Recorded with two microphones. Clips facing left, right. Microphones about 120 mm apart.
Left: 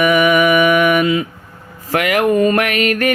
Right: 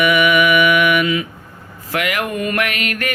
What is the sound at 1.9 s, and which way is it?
Speech, 45° left (ahead or behind).